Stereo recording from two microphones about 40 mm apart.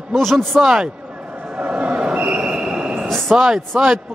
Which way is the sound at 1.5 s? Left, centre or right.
Right.